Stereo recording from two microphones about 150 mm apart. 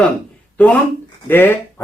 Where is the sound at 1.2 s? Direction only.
15° left (ahead or behind).